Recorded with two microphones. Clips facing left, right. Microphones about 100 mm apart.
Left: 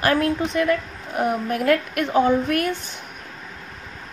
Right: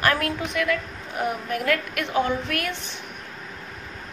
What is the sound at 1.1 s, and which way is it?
A woman's voice, 45° left (ahead or behind).